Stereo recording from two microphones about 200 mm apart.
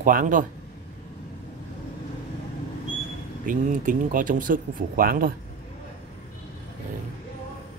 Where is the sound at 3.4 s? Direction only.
40° right (ahead or behind).